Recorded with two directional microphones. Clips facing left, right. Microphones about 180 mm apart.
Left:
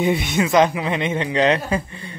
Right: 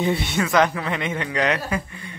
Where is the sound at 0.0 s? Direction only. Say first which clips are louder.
Left 3 dB; 15° left (ahead or behind).